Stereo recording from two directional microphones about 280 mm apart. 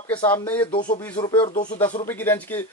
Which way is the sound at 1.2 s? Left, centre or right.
Centre.